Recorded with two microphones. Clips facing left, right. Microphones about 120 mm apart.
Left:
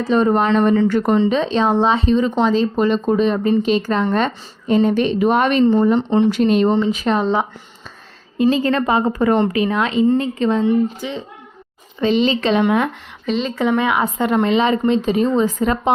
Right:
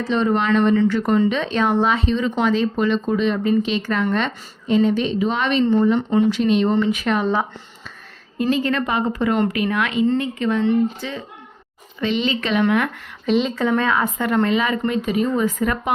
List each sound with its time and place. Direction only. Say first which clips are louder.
0.1 s a woman's voice: left 3 dB; 40° left (ahead or behind)
1.1 s speech: left 3 dB; 30° left (ahead or behind)
4.7 s a woman's voice: left 2 dB; 45° left (ahead or behind)
6.0 s speech: left 2 dB; 30° left (ahead or behind)
6.3 s a woman's voice: left 3 dB; 45° left (ahead or behind)
6.7 s speech: left 2 dB; 20° left (ahead or behind)
6.9 s speech: left 2 dB; 30° left (ahead or behind)
8.4 s speech: left 4 dB; 30° left (ahead or behind)
9.4 s speech: left 3 dB; 25° left (ahead or behind)
10.6 s speech: left 2 dB; 15° left (ahead or behind)
11.9 s speech: left 5 dB; 35° left (ahead or behind)
13.2 s speech: right 2 dB; centre (ahead or behind)
13.6 s speech: left 2 dB; 15° left (ahead or behind)